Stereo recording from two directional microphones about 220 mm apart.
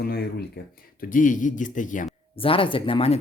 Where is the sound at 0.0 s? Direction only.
45° left (ahead or behind).